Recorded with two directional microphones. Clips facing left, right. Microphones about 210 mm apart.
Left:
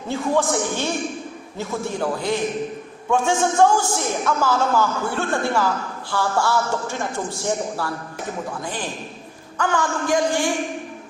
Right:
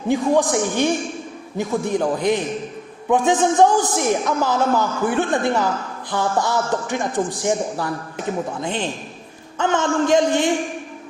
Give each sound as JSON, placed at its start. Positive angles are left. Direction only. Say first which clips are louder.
{"t": 0.1, "sound": "a man's voice", "louder": "right 4 dB", "side_deg": -15}